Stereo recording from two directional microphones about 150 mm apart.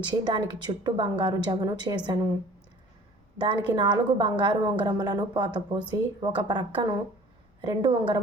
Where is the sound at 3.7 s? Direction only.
30° right (ahead or behind).